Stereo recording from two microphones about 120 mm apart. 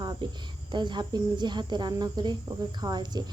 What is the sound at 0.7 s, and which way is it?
A woman's voice, 40° right (ahead or behind).